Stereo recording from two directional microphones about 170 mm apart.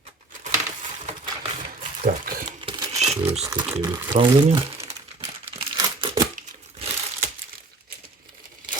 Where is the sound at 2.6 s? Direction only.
25° right (ahead or behind).